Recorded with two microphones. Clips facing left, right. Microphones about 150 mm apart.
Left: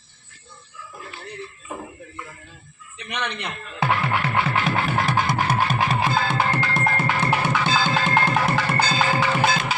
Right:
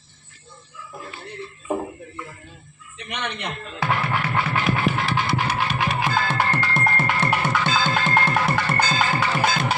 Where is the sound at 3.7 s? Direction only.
25° left (ahead or behind).